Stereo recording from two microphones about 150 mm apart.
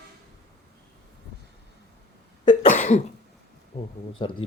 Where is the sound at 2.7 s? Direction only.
55° left (ahead or behind).